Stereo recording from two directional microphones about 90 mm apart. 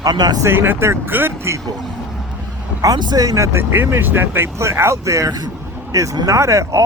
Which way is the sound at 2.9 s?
50° right (ahead or behind).